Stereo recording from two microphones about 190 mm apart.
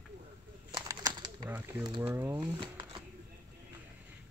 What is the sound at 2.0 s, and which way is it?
Speech, 10° right (ahead or behind).